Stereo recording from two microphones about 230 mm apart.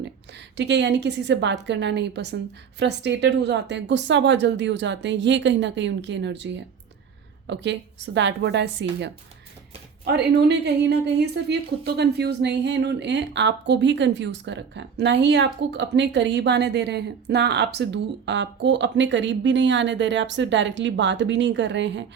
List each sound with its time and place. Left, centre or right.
0.5 s a woman's voice: right